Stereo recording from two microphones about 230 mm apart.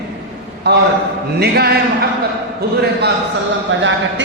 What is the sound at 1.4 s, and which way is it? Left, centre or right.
Speech, right.